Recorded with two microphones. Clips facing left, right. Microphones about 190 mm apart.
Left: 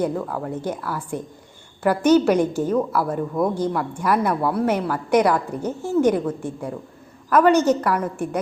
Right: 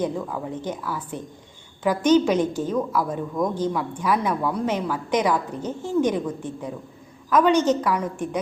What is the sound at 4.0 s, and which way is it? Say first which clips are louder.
A woman's voice: left 3 dB; 10° left (ahead or behind).